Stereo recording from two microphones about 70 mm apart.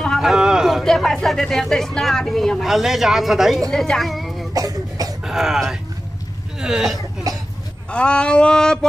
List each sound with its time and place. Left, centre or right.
0.2 s a sound: centre
0.8 s speech: centre
3.7 s a woman's voice: centre
4.6 s cough: right
5.2 s speech: centre
7.9 s a sound: centre